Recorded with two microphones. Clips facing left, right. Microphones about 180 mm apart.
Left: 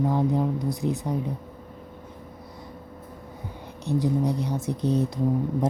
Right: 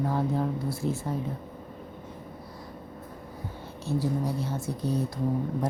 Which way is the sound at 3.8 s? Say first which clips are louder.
Left 4 dB; 20° left (ahead or behind).